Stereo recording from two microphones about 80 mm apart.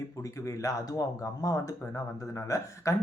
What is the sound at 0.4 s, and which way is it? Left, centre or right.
Speech, left.